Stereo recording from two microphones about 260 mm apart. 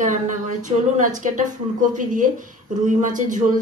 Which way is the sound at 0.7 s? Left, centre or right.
Right.